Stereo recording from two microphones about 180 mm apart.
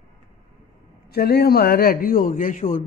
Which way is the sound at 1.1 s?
60° left (ahead or behind).